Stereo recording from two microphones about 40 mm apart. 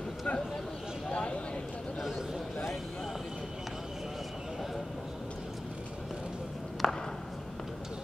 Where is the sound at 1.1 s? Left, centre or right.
Left.